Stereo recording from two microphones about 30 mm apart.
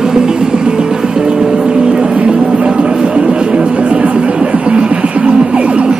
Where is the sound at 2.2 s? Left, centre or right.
Right.